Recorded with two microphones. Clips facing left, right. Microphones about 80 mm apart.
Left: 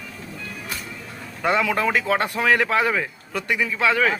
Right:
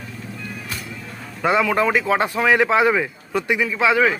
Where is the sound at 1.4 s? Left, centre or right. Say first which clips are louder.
Right 3 dB; centre.